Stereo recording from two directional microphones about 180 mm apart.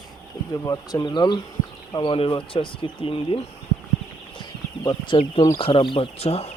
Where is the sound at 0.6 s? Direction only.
20° left (ahead or behind).